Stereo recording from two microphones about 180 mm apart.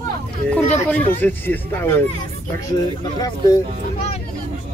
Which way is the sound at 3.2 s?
20° left (ahead or behind).